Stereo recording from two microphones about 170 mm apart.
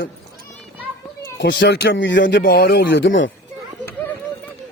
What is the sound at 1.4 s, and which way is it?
Speech, 80° left.